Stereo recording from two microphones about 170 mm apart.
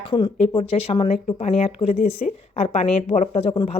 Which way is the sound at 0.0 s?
30° left (ahead or behind).